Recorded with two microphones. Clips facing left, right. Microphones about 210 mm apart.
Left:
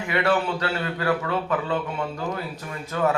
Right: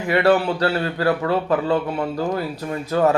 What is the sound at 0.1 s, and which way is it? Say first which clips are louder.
Speech: right 6 dB; 35° right (ahead or behind).